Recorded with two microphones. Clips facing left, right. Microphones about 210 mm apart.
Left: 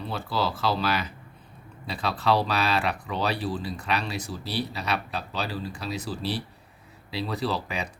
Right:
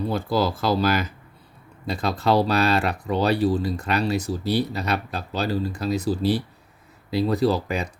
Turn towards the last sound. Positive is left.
turn(degrees=-45)  # may be behind; listen again after turning